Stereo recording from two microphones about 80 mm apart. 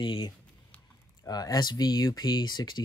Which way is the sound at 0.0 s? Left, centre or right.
Left.